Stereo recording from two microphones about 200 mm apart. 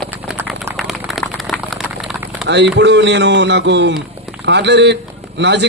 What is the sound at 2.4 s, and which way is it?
A man's voice, 60° right (ahead or behind).